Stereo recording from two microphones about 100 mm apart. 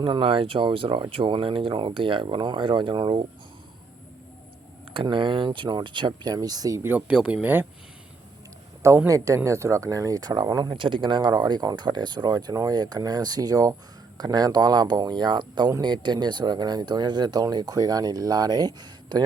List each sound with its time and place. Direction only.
0.0 s speech: 55° right (ahead or behind)
4.9 s speech: 55° right (ahead or behind); by 6.8 s 35° right (ahead or behind)
7.1 s speech: 10° right (ahead or behind)
9.0 s speech: 35° right (ahead or behind)